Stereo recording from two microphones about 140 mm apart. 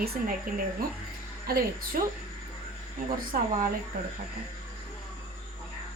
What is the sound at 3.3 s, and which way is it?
Speech, 80° right.